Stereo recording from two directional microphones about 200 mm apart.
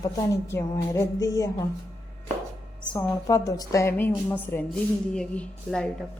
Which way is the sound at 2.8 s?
15° left (ahead or behind).